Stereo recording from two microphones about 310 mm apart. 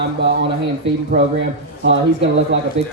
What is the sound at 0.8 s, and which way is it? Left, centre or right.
Speech, right.